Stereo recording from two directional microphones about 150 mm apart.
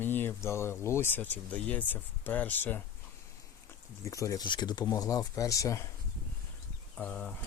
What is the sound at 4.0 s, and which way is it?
Speech, 20° left (ahead or behind).